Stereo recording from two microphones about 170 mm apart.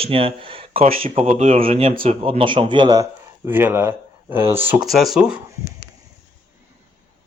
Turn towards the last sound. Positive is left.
turn(degrees=-5)  # may be behind; listen again after turning